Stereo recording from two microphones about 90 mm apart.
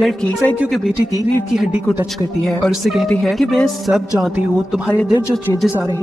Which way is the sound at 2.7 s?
5° right (ahead or behind).